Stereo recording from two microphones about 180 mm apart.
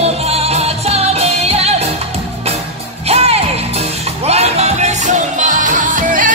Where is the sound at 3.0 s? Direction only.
35° right (ahead or behind).